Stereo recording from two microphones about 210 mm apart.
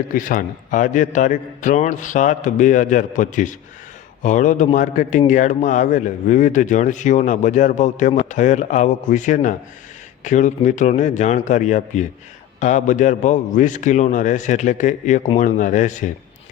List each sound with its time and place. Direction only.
0.1 s a man's voice: 40° left (ahead or behind)